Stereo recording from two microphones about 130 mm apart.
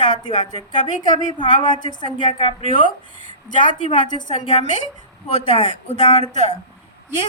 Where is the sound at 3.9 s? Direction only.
35° left (ahead or behind).